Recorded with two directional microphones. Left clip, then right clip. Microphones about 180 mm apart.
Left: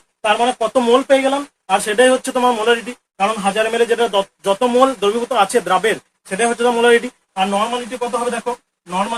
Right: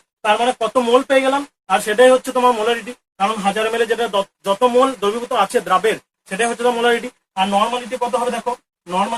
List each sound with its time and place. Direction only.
0.2 s a man's voice: 20° left (ahead or behind); by 7.4 s 35° left (ahead or behind)
7.5 s speech: 20° left (ahead or behind)